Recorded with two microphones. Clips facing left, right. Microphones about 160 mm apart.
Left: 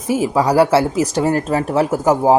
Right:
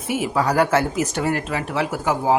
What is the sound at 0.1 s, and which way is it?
Speech, 35° left (ahead or behind).